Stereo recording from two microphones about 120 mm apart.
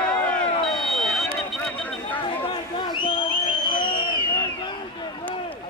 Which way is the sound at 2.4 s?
45° left (ahead or behind).